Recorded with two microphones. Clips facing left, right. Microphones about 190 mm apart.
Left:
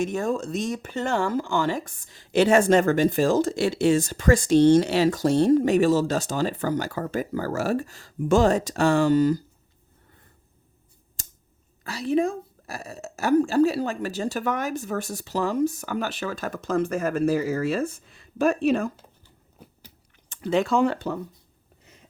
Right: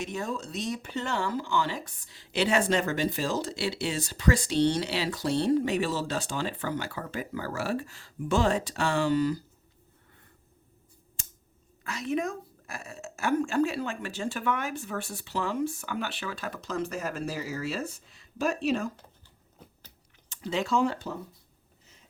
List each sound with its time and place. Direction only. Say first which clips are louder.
0.0 s speech: left 8 dB; 50° left (ahead or behind)
11.2 s scissors: left 3 dB; 35° left (ahead or behind)
11.8 s speech: left 7 dB; 35° left (ahead or behind); by 18.9 s 55° left (ahead or behind)
20.3 s speech: left 6 dB; 55° left (ahead or behind)